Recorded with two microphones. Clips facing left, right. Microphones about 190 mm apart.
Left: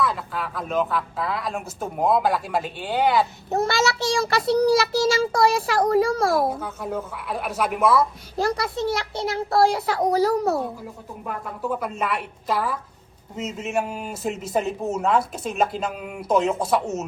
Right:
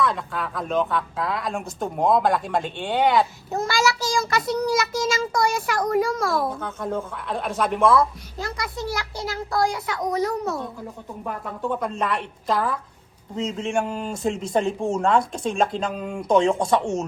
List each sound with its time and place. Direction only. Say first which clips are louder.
0.0 s speech: right 1 dB; centre (ahead or behind)
3.5 s a child's voice: left 2 dB; 25° left (ahead or behind)
6.5 s a woman's voice: right 1 dB; 10° left (ahead or behind)
8.4 s a child's voice: left 6 dB; 35° left (ahead or behind)
11.6 s speech: right 1 dB; 5° left (ahead or behind)